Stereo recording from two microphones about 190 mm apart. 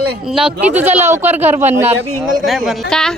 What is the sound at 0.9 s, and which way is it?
Speech, 35° right (ahead or behind).